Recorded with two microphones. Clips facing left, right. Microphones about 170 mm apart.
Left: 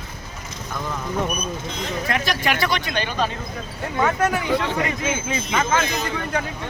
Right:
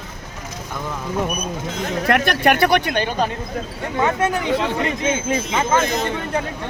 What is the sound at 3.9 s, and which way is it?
Speech, 25° right (ahead or behind).